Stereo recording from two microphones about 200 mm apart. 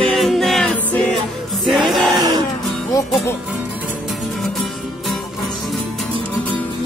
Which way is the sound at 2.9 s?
20° left (ahead or behind).